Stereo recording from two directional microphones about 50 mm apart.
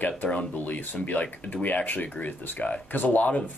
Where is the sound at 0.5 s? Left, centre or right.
Left.